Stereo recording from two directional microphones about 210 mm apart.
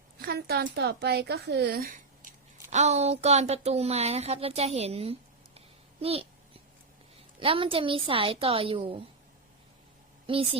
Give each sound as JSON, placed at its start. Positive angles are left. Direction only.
{"t": 0.2, "sound": "a woman's voice", "side_deg": -45}
{"t": 2.2, "sound": "a sound", "side_deg": -35}
{"t": 2.6, "sound": "a woman's voice", "side_deg": -35}
{"t": 5.5, "sound": "a sound", "side_deg": -30}
{"t": 7.3, "sound": "a woman's voice", "side_deg": -25}
{"t": 10.2, "sound": "a woman's voice", "side_deg": -25}